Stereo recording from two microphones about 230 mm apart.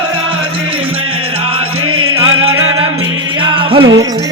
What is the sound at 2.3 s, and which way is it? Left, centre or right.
Music, right.